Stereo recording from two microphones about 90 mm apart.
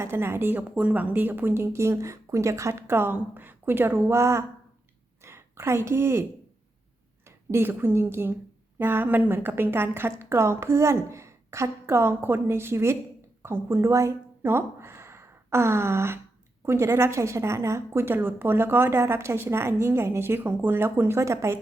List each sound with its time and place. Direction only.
0.0 s a woman's voice: 25° right (ahead or behind)
7.3 s a woman's voice: 30° right (ahead or behind)